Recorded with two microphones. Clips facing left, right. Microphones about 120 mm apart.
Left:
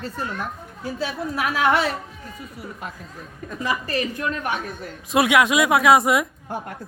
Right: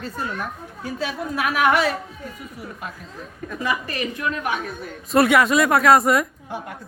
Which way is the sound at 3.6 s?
35° left (ahead or behind).